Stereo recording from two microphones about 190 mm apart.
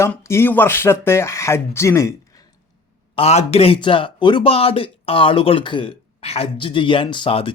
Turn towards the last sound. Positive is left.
turn(degrees=30)  # may be behind; listen again after turning